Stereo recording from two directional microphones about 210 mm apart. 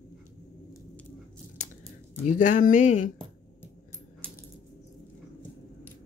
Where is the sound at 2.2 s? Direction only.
40° left (ahead or behind).